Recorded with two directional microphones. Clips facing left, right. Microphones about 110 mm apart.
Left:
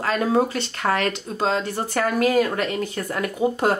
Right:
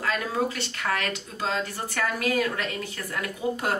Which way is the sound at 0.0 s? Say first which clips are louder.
Left 7 dB; 35° left (ahead or behind).